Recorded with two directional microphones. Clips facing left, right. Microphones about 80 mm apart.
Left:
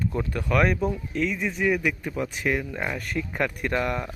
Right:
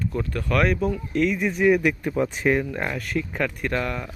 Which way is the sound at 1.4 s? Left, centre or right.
Centre.